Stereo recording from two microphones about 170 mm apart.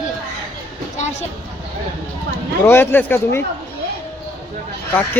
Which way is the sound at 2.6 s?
15° left (ahead or behind).